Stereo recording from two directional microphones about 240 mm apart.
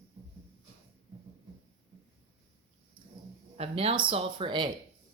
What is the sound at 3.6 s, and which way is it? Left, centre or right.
Speech, right.